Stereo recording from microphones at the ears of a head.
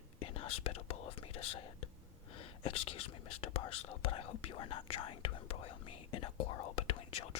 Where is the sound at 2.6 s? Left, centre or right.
Left.